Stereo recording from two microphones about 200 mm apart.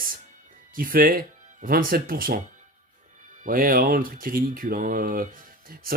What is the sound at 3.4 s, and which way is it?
Speech, 45° right (ahead or behind).